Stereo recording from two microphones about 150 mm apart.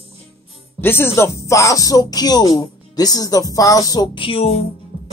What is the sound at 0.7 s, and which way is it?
Speech, 15° left (ahead or behind).